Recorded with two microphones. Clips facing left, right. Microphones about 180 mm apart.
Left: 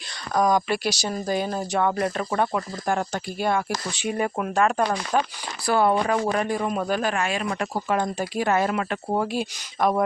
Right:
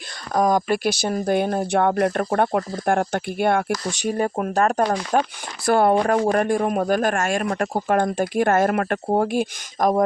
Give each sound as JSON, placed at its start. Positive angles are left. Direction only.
{"t": 0.3, "sound": "speech", "side_deg": -50}
{"t": 3.8, "sound": "a man's voice", "side_deg": -40}